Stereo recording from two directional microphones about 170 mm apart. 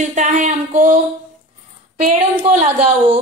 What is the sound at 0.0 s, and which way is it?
A woman's voice, 45° right (ahead or behind).